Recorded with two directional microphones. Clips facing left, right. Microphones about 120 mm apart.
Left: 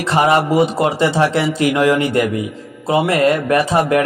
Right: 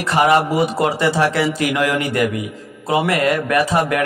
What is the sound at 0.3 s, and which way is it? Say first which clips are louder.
A man's voice: left 2 dB; 25° left (ahead or behind).